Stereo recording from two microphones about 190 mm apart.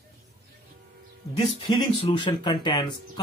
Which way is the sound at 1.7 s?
25° left (ahead or behind).